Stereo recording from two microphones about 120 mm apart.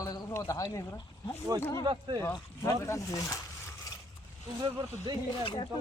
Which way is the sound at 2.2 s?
25° left (ahead or behind).